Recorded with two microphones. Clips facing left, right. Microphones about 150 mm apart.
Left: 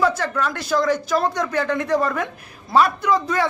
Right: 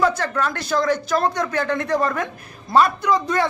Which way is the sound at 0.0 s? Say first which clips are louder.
Even; 10° left (ahead or behind).